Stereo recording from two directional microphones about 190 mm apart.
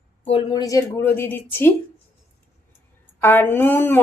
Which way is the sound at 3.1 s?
10° left (ahead or behind).